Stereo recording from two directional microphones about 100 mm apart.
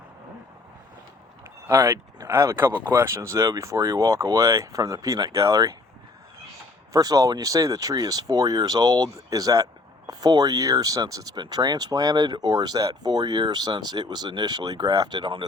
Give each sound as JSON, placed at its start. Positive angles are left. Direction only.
{"t": 1.6, "sound": "speech", "side_deg": -30}
{"t": 6.9, "sound": "speech", "side_deg": -35}